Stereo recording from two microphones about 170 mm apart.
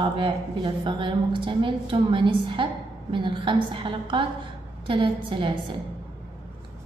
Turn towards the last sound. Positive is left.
turn(degrees=-30)  # may be behind; listen again after turning